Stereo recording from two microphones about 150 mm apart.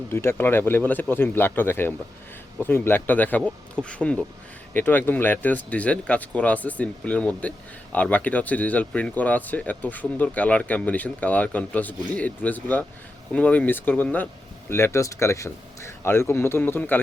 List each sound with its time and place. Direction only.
0.1 s speech: 15° left (ahead or behind)